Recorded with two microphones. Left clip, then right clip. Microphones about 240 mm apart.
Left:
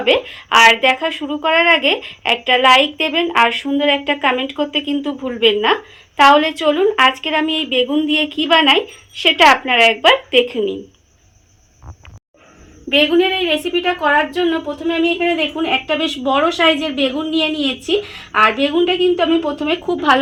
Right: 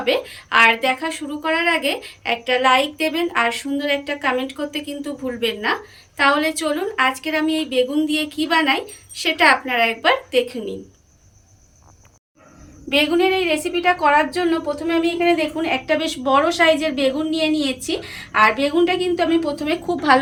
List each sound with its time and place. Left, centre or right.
0.3 s speech: left
12.9 s speech: left